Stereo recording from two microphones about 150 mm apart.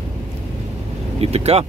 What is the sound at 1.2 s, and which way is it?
Speech, 45° right (ahead or behind).